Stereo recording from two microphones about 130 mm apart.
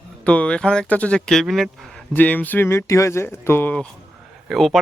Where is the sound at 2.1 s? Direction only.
10° left (ahead or behind).